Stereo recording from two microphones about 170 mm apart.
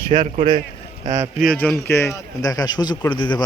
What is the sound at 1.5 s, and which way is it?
A man's voice, 5° left (ahead or behind).